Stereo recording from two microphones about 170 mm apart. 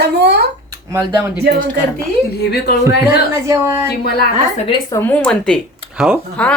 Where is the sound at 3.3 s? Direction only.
15° right (ahead or behind).